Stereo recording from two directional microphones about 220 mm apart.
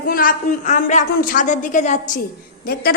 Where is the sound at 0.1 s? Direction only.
40° left (ahead or behind).